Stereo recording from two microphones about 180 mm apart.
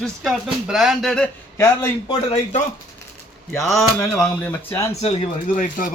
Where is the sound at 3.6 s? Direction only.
Centre (ahead or behind).